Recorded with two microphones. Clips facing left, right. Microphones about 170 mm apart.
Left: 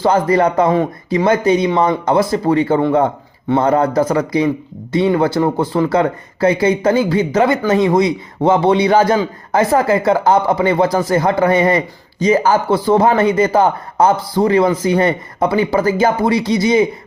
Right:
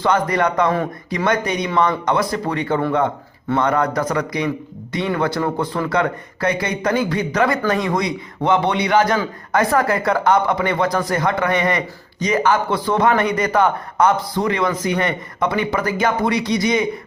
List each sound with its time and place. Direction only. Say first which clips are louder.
0.0 s speech: left 5 dB; 30° left (ahead or behind)